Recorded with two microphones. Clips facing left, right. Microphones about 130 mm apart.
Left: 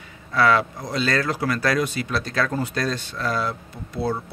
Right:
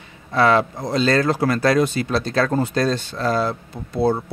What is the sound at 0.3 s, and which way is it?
Speech, 25° right (ahead or behind).